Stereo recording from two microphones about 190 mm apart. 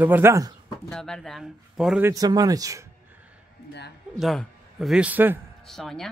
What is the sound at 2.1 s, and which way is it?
Speech, 20° right (ahead or behind).